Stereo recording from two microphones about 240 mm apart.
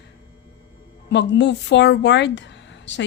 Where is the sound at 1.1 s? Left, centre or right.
Left.